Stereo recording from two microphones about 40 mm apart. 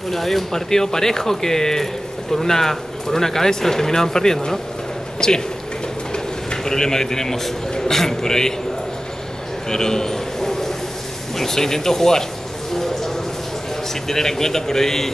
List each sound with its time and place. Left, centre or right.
0.1 s a man's voice: centre
9.7 s a sound: centre
11.3 s speech: centre
14.0 s speech: centre